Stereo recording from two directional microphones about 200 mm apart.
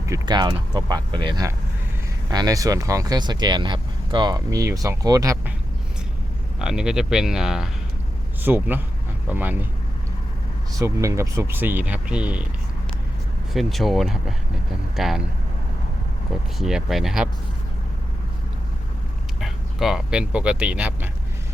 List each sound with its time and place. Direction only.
0.0 s speech: 20° right (ahead or behind)
6.6 s speech: 5° right (ahead or behind)
10.8 s speech: 15° right (ahead or behind)
13.5 s speech: centre (ahead or behind)
16.6 s speech: centre (ahead or behind)
19.4 s speech: centre (ahead or behind)